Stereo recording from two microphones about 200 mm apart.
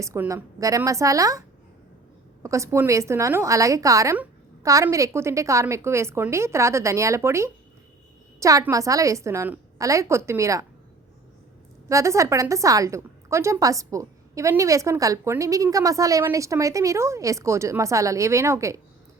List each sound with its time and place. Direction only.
0.0 s a woman's voice: 15° right (ahead or behind)
11.9 s a woman's voice: 15° right (ahead or behind)